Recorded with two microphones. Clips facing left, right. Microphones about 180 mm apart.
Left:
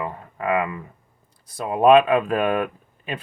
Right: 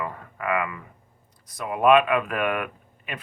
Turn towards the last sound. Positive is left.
turn(degrees=30)  # may be behind; listen again after turning